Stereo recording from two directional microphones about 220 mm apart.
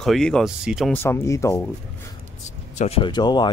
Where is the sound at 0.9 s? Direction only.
10° left (ahead or behind).